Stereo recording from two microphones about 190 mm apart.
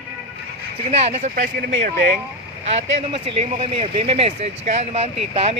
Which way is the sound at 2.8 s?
30° right (ahead or behind).